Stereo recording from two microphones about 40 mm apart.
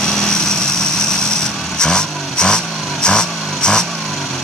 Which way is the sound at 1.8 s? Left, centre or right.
Centre.